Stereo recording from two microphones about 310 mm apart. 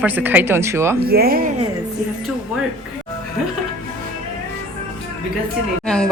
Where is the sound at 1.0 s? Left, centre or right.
Right.